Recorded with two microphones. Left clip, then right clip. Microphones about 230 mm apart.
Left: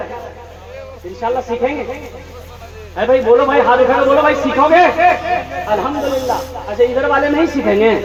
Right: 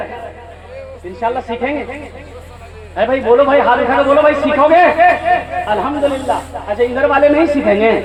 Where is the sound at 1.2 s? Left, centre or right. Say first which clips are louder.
Even; right.